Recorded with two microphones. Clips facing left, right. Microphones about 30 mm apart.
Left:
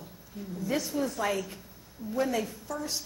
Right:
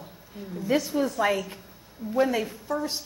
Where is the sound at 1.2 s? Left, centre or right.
Centre.